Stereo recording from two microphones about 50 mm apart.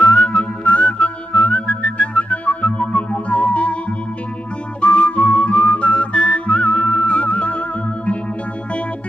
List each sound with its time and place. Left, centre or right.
0.0 s whistling: left
4.8 s whistling: left